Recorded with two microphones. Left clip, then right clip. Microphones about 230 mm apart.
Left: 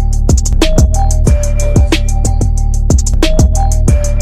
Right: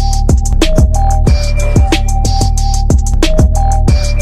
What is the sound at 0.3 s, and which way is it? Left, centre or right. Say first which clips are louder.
Music: left 2 dB; centre.